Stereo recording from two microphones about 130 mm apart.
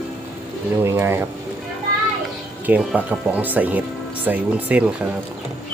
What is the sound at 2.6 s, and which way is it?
Speech, 10° right (ahead or behind).